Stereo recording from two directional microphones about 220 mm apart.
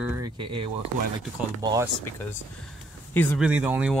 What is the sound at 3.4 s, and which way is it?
Speech, 5° right (ahead or behind).